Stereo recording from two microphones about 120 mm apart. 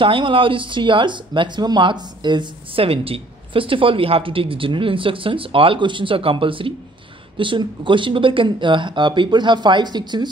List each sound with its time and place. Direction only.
0.0 s speech: 45° right (ahead or behind)